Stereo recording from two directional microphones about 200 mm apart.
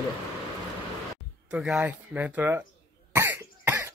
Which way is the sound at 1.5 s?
5° right (ahead or behind).